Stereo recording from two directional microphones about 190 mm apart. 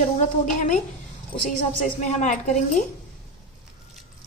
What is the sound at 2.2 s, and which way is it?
Speech, 40° left (ahead or behind).